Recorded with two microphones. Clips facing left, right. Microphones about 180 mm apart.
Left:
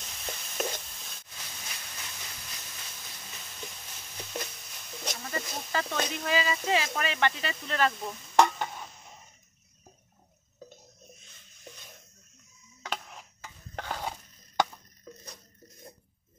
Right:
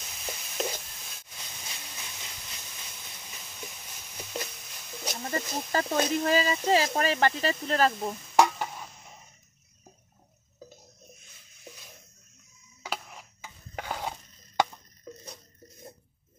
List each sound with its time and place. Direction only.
0.0 s a sound: 5° right (ahead or behind)
5.7 s speech: 40° right (ahead or behind)
8.1 s stir: 5° right (ahead or behind)
11.3 s music: 5° right (ahead or behind)
12.8 s stir: 5° right (ahead or behind)